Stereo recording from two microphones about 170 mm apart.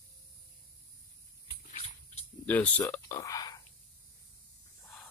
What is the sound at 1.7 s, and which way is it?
Dog, 35° left (ahead or behind).